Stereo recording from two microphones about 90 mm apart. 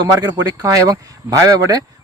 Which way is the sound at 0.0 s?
50° right (ahead or behind).